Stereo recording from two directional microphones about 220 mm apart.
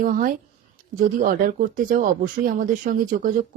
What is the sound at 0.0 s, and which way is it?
Speech, 40° right (ahead or behind).